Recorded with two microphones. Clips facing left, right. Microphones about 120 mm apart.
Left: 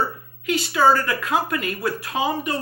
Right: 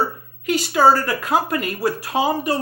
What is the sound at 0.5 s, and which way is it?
Speech, 40° right (ahead or behind).